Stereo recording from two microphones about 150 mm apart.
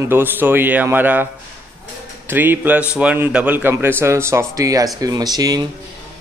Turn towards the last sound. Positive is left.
turn(degrees=-25)  # may be behind; listen again after turning